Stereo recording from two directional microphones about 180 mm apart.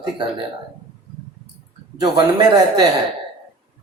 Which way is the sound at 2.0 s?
25° right (ahead or behind).